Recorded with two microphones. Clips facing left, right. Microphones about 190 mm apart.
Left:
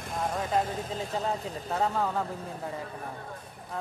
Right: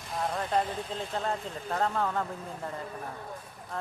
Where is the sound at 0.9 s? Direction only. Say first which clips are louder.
Left 1 dB; 5° left (ahead or behind).